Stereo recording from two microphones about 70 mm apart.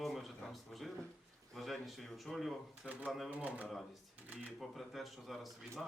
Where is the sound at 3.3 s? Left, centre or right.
Right.